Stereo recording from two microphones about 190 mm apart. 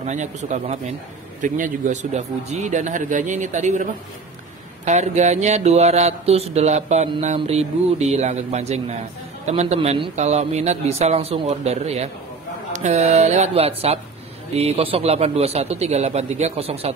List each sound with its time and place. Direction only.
0.0 s a man's voice: 40° right (ahead or behind)
4.8 s a man's voice: 35° right (ahead or behind)